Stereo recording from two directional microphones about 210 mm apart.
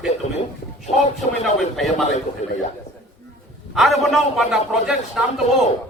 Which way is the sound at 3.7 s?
Centre (ahead or behind).